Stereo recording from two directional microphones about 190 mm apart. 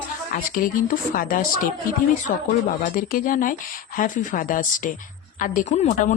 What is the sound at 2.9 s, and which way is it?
Speech, 45° left (ahead or behind).